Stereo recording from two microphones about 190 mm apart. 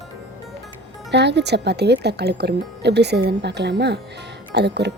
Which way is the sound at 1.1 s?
65° right (ahead or behind).